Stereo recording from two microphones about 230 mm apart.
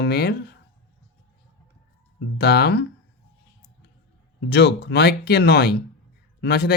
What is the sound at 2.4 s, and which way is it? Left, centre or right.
Speech, left.